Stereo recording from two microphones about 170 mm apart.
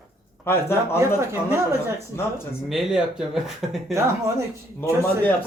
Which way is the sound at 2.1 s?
15° left (ahead or behind).